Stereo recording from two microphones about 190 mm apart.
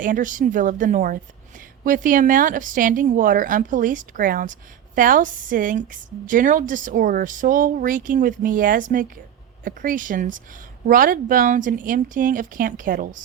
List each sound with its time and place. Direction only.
0.0 s a woman's voice: 45° right (ahead or behind)